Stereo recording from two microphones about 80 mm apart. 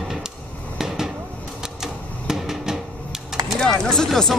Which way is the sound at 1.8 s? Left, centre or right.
Centre.